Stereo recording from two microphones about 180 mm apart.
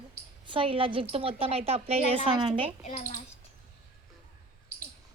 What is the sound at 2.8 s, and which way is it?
Speech, 45° left (ahead or behind).